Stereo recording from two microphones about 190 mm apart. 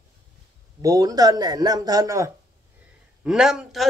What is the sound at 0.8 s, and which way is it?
Speech, 20° right (ahead or behind).